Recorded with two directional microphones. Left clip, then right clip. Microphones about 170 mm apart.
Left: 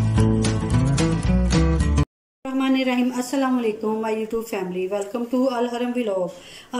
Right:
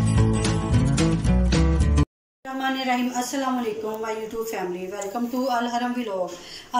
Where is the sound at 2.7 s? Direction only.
60° left (ahead or behind).